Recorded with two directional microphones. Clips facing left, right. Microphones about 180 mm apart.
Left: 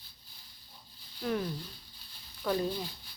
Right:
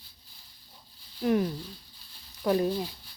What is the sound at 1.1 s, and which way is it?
Speech, 10° right (ahead or behind).